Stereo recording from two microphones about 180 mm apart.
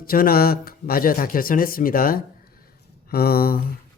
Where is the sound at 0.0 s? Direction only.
55° left (ahead or behind).